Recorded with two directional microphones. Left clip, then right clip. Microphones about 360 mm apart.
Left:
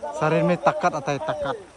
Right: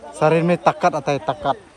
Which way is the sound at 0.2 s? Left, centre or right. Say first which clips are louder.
Right 5 dB; centre.